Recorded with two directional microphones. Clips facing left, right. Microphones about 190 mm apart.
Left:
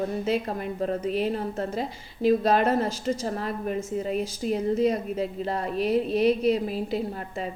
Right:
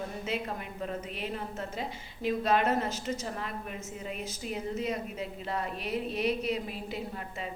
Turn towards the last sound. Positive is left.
turn(degrees=40)  # may be behind; listen again after turning